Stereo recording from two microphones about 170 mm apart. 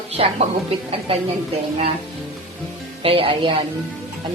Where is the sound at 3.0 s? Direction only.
30° right (ahead or behind).